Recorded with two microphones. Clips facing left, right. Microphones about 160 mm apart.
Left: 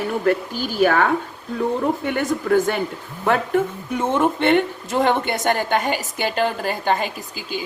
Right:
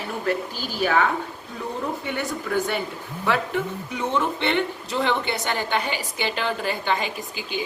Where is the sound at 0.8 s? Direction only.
50° left (ahead or behind).